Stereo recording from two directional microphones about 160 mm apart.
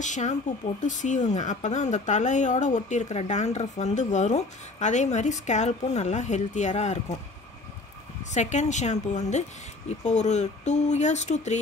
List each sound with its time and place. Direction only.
0.0 s speech: 50° left (ahead or behind)
8.3 s speech: 45° left (ahead or behind)